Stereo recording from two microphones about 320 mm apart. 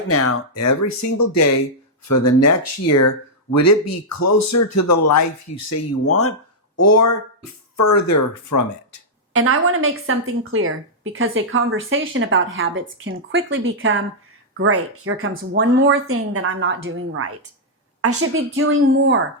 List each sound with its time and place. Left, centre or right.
0.1 s speech: left
9.3 s a woman's voice: right